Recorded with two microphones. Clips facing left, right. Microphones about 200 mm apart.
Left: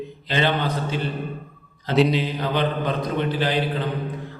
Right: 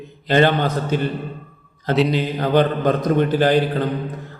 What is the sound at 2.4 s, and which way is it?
A man's voice, 45° right (ahead or behind).